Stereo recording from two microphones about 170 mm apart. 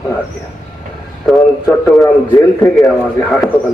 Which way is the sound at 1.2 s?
Centre (ahead or behind).